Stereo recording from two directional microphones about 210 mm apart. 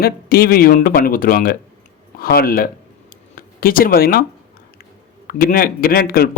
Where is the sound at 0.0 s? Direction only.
45° left (ahead or behind).